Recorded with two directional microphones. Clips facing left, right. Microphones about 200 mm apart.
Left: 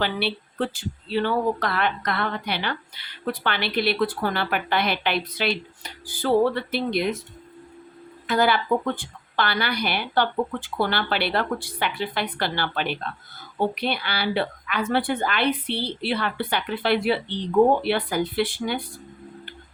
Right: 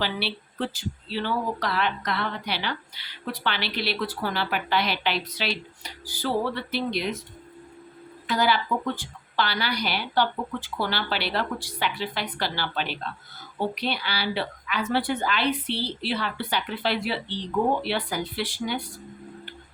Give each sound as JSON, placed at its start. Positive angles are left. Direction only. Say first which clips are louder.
{"t": 0.0, "sound": "speech", "louder": "left 4 dB", "side_deg": 55}
{"t": 8.3, "sound": "speech", "louder": "left 3 dB", "side_deg": 55}